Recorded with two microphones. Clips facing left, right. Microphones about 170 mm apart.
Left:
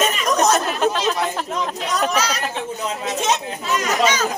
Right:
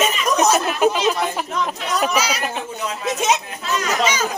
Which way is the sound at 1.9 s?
10° right (ahead or behind).